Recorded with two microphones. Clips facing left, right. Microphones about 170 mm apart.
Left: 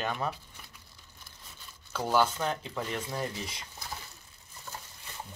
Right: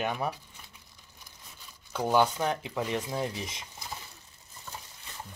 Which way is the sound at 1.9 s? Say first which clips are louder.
Right 2 dB; 15° right (ahead or behind).